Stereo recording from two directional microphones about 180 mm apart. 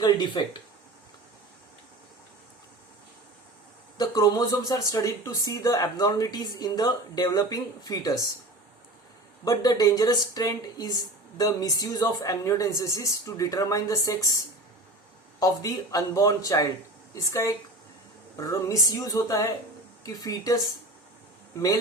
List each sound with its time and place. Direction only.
0.4 s speech: 25° left (ahead or behind)
3.9 s speech: 20° left (ahead or behind)
9.4 s speech: 20° left (ahead or behind)
15.4 s speech: 20° left (ahead or behind)